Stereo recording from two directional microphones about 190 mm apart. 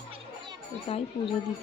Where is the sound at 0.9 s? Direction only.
30° left (ahead or behind).